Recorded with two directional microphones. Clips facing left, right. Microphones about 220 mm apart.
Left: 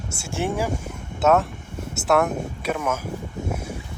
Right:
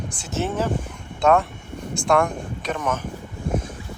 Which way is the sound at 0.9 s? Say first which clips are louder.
Even; 5° left (ahead or behind).